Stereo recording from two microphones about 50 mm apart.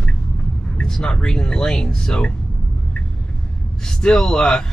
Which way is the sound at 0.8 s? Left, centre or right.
Centre.